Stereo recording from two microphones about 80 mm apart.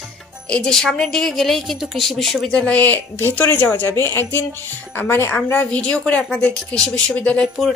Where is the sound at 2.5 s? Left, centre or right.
Centre.